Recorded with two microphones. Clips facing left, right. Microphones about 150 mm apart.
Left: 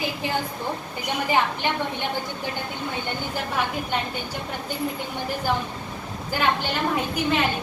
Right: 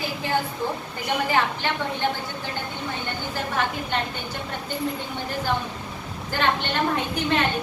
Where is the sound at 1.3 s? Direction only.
15° left (ahead or behind).